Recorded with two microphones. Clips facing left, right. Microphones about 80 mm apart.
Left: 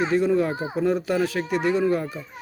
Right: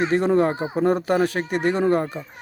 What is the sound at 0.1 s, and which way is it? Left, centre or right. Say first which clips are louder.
Speech: right 2 dB; right.